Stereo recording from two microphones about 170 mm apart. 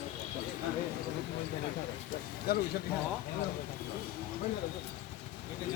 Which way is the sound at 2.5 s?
65° left (ahead or behind).